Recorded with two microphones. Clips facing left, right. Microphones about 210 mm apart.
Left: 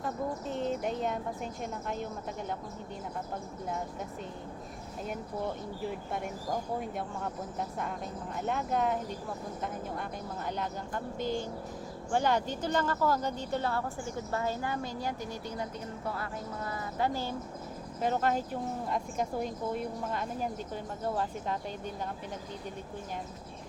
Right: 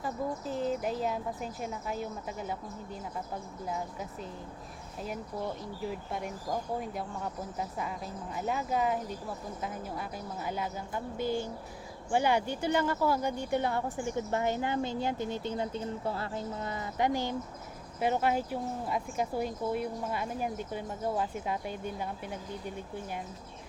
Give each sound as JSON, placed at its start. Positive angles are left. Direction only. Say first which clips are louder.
{"t": 0.0, "sound": "speech", "louder": "even", "side_deg": 0}
{"t": 5.8, "sound": "speech", "louder": "even", "side_deg": 0}
{"t": 7.6, "sound": "a woman's voice", "louder": "even", "side_deg": -5}